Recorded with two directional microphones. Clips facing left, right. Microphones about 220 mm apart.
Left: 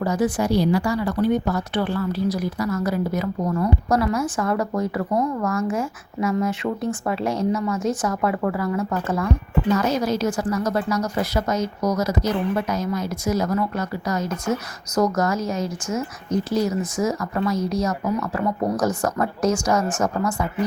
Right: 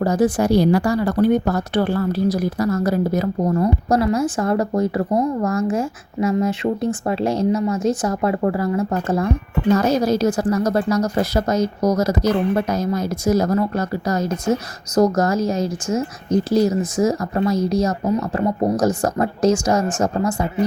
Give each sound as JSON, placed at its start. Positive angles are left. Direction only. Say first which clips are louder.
{"t": 0.0, "sound": "a woman's voice", "louder": "right 4 dB", "side_deg": -40}
{"t": 9.6, "sound": "a woman's voice", "louder": "right 5 dB", "side_deg": -40}